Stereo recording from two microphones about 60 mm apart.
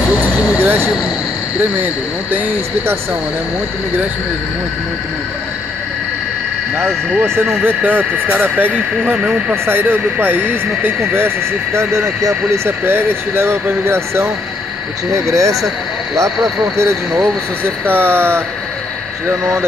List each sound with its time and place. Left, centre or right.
0.6 s speech: right
2.3 s speech: right
7.6 s speech: right
15.1 s speech: right
17.6 s speech: right